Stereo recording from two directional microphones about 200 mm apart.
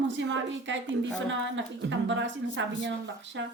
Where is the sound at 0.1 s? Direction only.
65° right (ahead or behind).